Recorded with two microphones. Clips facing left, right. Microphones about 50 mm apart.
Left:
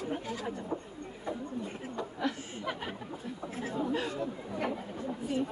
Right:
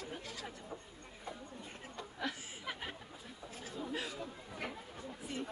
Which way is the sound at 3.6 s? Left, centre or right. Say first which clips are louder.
Left 10 dB; left.